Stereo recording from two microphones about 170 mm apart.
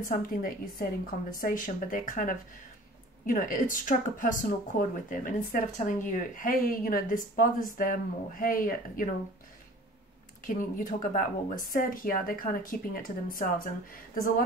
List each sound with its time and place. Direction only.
0.0 s speech: 55° left (ahead or behind)
10.4 s speech: 50° left (ahead or behind)